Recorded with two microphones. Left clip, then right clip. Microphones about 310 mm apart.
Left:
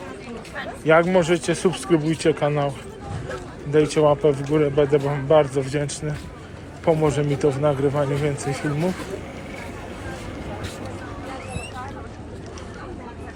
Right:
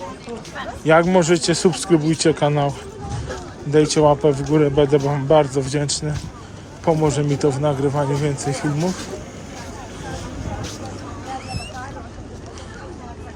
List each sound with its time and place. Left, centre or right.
0.9 s a man's voice: centre